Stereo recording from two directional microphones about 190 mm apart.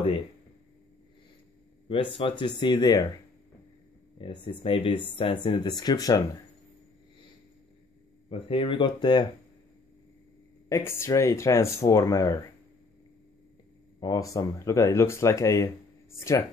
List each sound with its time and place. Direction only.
1.9 s speech: 30° left (ahead or behind)
4.2 s speech: 25° left (ahead or behind)
8.3 s speech: 30° left (ahead or behind)
10.7 s speech: 15° left (ahead or behind)
13.9 s speech: 20° left (ahead or behind)